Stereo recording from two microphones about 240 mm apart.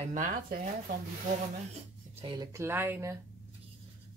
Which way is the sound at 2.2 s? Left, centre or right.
Centre.